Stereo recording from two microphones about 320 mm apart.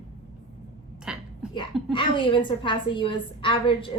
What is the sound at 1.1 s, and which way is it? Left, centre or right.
Speech, centre.